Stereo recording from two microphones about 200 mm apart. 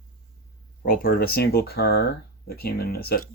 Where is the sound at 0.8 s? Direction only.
45° left (ahead or behind).